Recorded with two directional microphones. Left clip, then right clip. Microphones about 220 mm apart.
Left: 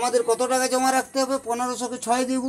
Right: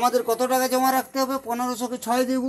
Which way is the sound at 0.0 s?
30° right (ahead or behind).